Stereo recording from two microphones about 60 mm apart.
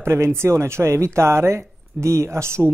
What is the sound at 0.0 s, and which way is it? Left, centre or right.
A man's voice, right.